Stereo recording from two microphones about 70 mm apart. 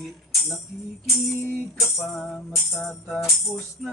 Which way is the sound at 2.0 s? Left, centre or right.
Centre.